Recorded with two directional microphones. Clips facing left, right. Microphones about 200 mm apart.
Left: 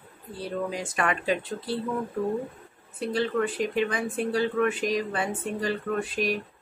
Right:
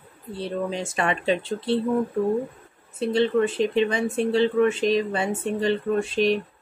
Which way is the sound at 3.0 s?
25° right (ahead or behind).